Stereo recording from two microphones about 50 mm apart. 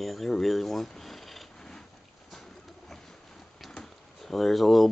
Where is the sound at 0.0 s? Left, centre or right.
Centre.